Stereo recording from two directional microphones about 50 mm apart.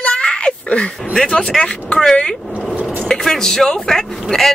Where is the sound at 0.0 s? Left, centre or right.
Left.